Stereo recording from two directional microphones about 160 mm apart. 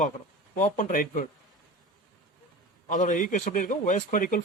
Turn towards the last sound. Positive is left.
turn(degrees=55)  # may be behind; listen again after turning